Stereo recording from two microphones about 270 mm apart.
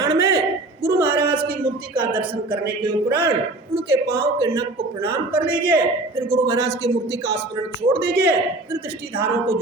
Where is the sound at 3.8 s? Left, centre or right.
Right.